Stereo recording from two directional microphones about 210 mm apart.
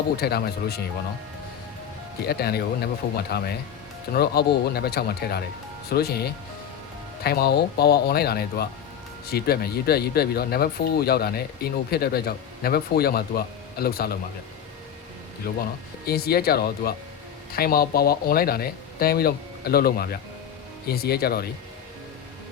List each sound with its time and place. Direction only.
0.2 s speech: 50° left (ahead or behind)
2.2 s speech: 50° left (ahead or behind)
16.0 s speech: 45° left (ahead or behind)